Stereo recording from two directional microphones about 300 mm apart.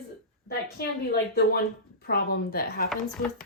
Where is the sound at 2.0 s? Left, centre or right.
Left.